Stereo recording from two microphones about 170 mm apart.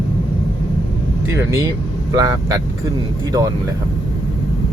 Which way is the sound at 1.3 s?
15° right (ahead or behind).